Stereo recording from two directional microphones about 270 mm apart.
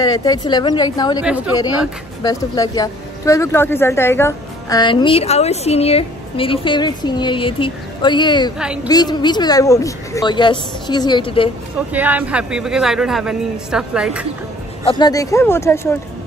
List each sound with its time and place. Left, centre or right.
0.0 s a woman's voice: centre
2.2 s a woman's voice: centre
11.9 s speech: centre
14.9 s a woman's voice: centre